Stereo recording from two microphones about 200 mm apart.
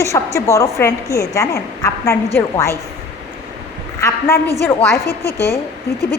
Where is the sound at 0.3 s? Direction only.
15° left (ahead or behind).